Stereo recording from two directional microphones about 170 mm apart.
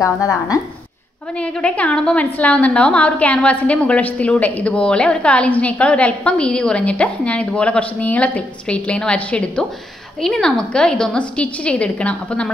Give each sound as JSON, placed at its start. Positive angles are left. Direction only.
{"t": 0.0, "sound": "speech", "side_deg": 20}
{"t": 1.4, "sound": "a woman's voice", "side_deg": 5}